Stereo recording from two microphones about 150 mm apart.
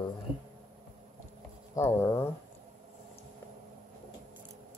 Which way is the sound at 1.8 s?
15° left (ahead or behind).